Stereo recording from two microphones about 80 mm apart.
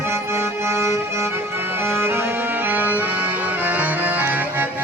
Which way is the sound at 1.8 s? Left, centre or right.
Right.